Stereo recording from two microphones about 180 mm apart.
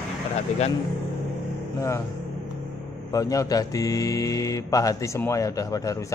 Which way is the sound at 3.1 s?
20° left (ahead or behind).